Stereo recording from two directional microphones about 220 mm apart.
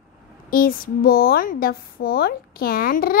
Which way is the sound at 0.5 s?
40° left (ahead or behind).